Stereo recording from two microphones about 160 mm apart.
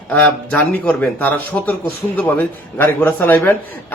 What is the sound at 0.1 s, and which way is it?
A man's voice, 10° left (ahead or behind).